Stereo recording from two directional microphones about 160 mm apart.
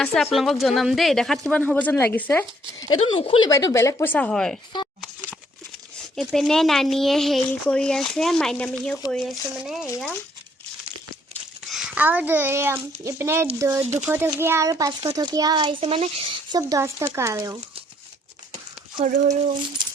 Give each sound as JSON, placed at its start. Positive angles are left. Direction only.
{"t": 0.0, "sound": "speech", "side_deg": 5}
{"t": 2.8, "sound": "speech", "side_deg": 25}
{"t": 3.5, "sound": "speech", "side_deg": 20}
{"t": 6.1, "sound": "speech", "side_deg": 0}
{"t": 11.7, "sound": "a child's voice", "side_deg": -5}
{"t": 16.5, "sound": "a child's voice", "side_deg": -20}
{"t": 19.0, "sound": "speech", "side_deg": -50}